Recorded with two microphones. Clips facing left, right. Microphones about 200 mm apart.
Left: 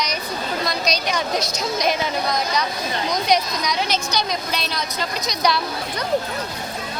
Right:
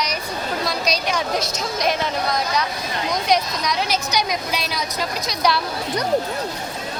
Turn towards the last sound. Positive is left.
turn(degrees=-5)  # may be behind; listen again after turning